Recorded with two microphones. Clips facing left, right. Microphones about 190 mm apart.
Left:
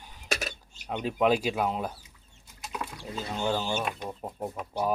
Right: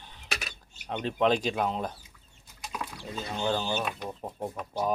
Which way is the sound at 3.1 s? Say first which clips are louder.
Even; 5° left (ahead or behind).